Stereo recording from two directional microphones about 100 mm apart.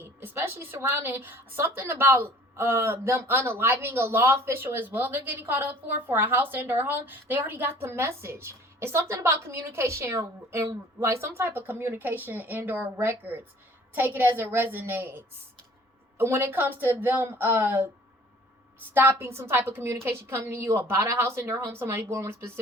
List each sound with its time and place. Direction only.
0.0 s a woman's voice: 20° right (ahead or behind)
18.9 s a woman's voice: 20° right (ahead or behind)